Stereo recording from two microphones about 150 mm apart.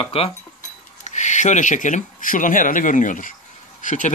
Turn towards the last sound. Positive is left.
turn(degrees=55)  # may be behind; listen again after turning